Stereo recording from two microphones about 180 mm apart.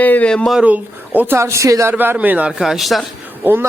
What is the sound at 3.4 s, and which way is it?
Speech, 10° right (ahead or behind).